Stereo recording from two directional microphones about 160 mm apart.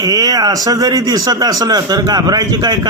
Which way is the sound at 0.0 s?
25° right (ahead or behind).